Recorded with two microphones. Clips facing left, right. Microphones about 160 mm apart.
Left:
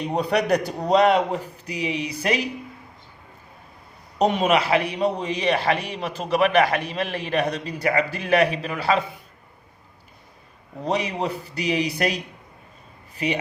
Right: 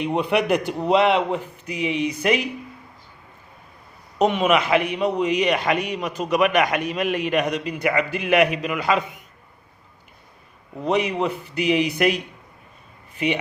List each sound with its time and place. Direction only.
0.0 s a man's voice: 40° left (ahead or behind)
4.2 s a man's voice: 35° left (ahead or behind)
10.8 s a man's voice: 35° left (ahead or behind)